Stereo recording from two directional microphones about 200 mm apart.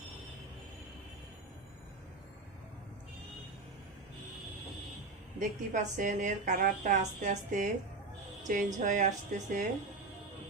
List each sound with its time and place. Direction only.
5.4 s a woman's voice: 40° right (ahead or behind)